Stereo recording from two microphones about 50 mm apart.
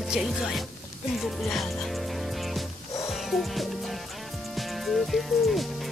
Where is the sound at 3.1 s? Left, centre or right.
Centre.